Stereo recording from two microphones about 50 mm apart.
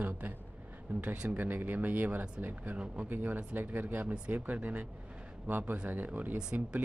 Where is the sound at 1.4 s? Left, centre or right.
Right.